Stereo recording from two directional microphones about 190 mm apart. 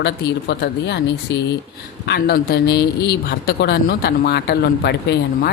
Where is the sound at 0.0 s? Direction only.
60° left (ahead or behind).